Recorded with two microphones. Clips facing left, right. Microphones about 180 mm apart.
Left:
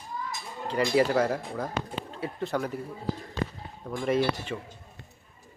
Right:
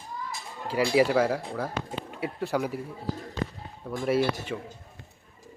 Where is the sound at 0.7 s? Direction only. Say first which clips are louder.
Right 1 dB; 10° right (ahead or behind).